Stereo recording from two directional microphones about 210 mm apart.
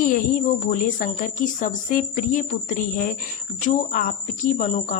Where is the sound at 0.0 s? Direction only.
40° left (ahead or behind).